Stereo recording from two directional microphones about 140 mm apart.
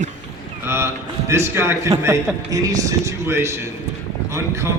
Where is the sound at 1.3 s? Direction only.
20° right (ahead or behind).